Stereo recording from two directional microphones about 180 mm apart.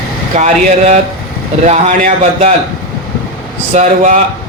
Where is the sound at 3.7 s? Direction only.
40° right (ahead or behind).